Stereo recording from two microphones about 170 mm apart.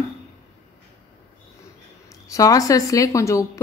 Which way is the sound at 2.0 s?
20° left (ahead or behind).